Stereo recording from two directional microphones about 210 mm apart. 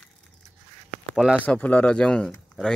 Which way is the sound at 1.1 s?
5° right (ahead or behind).